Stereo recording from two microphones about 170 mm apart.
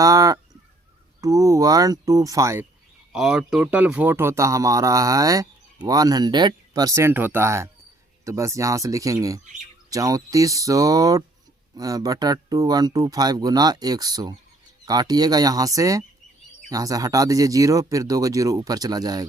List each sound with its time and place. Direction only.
0.0 s honk: 20° right (ahead or behind)
1.2 s speech: 20° right (ahead or behind)
3.1 s speech: 5° right (ahead or behind); by 19.3 s 20° right (ahead or behind)